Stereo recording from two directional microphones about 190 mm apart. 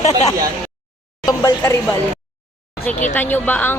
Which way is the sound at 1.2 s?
20° left (ahead or behind).